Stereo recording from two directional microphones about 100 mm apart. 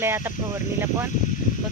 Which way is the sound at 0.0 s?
25° right (ahead or behind).